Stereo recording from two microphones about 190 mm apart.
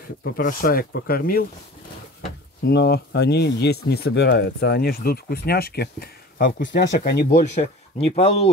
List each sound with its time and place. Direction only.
0.2 s speech: 50° left (ahead or behind)
2.6 s speech: 60° left (ahead or behind)
7.1 s speech: 50° left (ahead or behind); by 8.5 s 35° left (ahead or behind)